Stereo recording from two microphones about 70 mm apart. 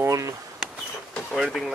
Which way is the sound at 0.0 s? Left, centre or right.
Right.